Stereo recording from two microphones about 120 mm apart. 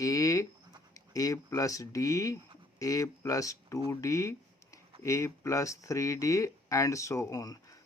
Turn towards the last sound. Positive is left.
turn(degrees=30)  # may be behind; listen again after turning